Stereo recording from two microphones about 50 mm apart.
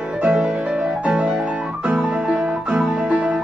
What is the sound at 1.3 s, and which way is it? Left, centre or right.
Piano, centre.